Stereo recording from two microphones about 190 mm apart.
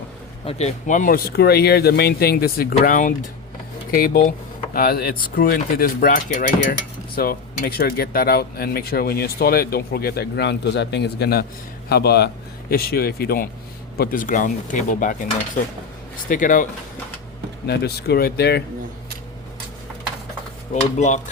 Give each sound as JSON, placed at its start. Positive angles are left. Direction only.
{"t": 0.4, "sound": "speech", "side_deg": 40}
{"t": 4.7, "sound": "speech", "side_deg": 50}
{"t": 17.7, "sound": "speech", "side_deg": 55}
{"t": 20.9, "sound": "speech", "side_deg": 40}